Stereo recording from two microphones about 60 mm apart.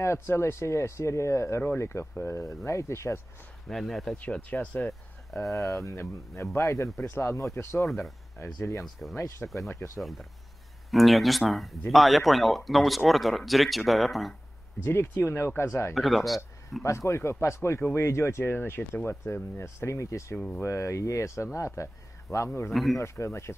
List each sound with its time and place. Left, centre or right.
0.0 s speech: left
3.6 s speech: centre
4.3 s speech: left
5.3 s speech: left
9.0 s speech: left
9.9 s speech: centre
14.8 s speech: left
15.9 s speech: centre
16.8 s speech: left
20.3 s speech: centre
20.6 s speech: left
22.7 s speech: centre
22.9 s speech: left